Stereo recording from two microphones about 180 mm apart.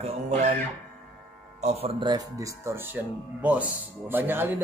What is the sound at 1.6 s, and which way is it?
A man's voice, 35° right (ahead or behind).